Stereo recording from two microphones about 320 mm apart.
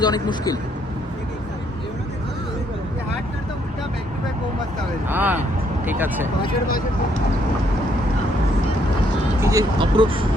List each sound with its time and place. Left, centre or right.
0.0 s speech: centre
5.0 s speech: centre
9.4 s speech: centre